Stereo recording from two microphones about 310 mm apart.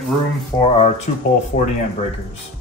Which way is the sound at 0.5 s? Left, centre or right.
Centre.